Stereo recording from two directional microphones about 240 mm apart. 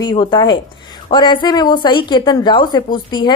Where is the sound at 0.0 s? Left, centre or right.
Centre.